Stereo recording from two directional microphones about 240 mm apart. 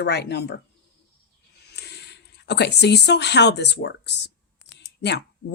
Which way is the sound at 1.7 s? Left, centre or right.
Left.